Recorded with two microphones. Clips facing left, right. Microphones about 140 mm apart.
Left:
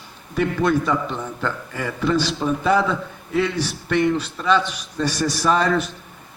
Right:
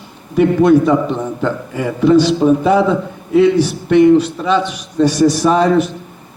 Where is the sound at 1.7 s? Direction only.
10° right (ahead or behind).